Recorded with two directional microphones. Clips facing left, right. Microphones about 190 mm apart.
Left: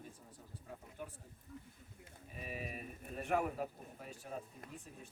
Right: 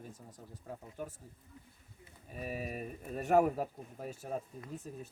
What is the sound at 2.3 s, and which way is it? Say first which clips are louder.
Speech: right 6 dB; 40° right (ahead or behind).